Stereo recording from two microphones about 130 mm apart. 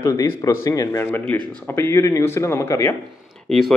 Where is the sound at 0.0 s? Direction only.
25° left (ahead or behind).